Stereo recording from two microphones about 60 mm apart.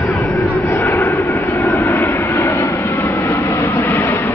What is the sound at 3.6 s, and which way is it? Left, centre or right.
Train, left.